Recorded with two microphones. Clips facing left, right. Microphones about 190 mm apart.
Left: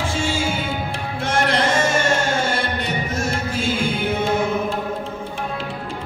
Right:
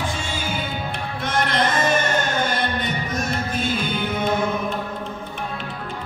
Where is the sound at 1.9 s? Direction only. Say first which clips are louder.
Left 2 dB; 90° left.